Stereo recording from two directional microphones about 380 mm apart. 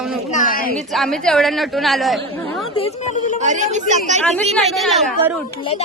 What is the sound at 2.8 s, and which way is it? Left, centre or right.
Speech, centre.